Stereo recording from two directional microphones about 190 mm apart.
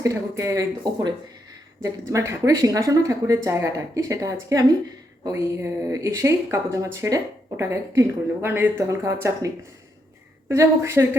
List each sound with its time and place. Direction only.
0.0 s speech: 15° right (ahead or behind)
10.5 s speech: 15° right (ahead or behind)